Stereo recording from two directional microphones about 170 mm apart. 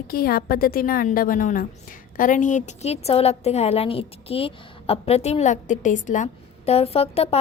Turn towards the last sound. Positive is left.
turn(degrees=35)  # may be behind; listen again after turning